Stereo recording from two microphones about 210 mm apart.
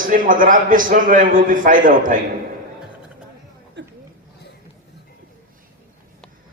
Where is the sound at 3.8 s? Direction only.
55° right (ahead or behind).